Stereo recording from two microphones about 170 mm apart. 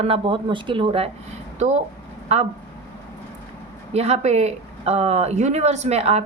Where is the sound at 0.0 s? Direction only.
30° right (ahead or behind).